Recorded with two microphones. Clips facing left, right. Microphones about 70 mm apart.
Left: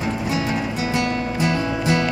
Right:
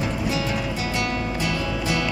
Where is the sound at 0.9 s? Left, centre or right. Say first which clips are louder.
Left 4 dB; left.